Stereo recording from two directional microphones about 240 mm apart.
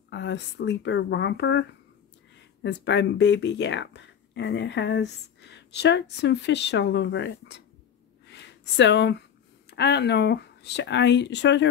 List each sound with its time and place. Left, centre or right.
0.1 s speech: left
8.3 s a sound: left
9.7 s speech: left